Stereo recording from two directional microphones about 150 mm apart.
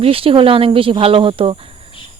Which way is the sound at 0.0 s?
40° right (ahead or behind).